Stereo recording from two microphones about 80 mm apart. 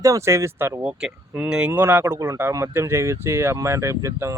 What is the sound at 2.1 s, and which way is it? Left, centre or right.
Speech, right.